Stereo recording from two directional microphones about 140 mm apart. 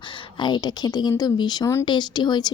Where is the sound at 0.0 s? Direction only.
35° left (ahead or behind).